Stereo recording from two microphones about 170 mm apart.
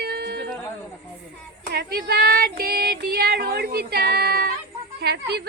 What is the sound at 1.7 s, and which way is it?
Child singing, 70° right (ahead or behind).